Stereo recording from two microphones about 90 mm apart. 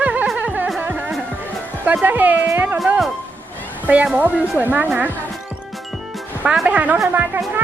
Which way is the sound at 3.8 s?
15° right (ahead or behind).